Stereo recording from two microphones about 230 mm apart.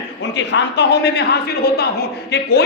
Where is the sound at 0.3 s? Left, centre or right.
Left.